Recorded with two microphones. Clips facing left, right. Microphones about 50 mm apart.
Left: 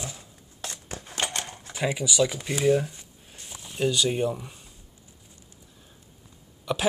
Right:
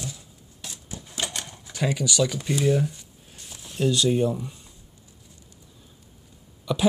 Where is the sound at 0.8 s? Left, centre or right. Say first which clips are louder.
Left 1 dB; left.